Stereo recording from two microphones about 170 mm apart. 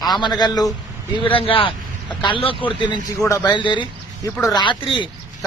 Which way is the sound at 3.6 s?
25° left (ahead or behind).